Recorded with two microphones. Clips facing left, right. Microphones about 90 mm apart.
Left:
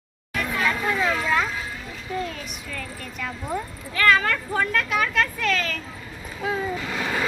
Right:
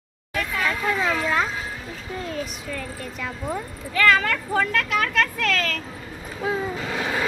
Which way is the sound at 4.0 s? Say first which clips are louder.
Even; 90° right.